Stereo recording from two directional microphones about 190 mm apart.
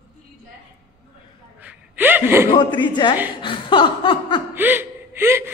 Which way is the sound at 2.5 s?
25° left (ahead or behind).